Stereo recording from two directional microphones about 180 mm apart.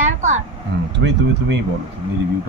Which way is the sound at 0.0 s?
40° right (ahead or behind).